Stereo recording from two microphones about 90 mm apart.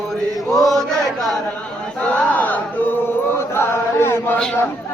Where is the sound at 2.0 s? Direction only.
15° left (ahead or behind).